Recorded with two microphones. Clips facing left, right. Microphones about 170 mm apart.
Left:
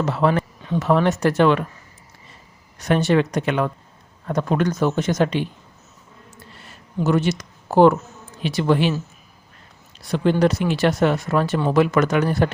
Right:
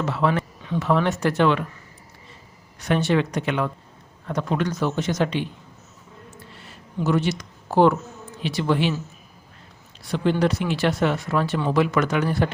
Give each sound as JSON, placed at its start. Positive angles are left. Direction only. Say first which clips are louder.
{"t": 0.0, "sound": "speech", "louder": "left 3 dB", "side_deg": 40}
{"t": 2.7, "sound": "speech", "louder": "left 3 dB", "side_deg": 45}
{"t": 7.0, "sound": "speech", "louder": "left 3 dB", "side_deg": 45}
{"t": 10.1, "sound": "speech", "louder": "left 3 dB", "side_deg": 45}